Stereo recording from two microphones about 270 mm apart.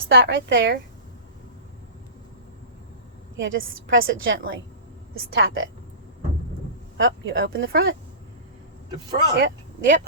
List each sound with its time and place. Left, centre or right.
0.1 s a woman's voice: right
3.4 s a woman's voice: right
6.9 s a woman's voice: right
9.3 s speech: right